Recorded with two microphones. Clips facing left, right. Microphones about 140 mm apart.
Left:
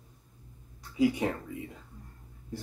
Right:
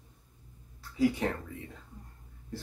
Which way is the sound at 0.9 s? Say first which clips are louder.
Left 1 dB; 15° left (ahead or behind).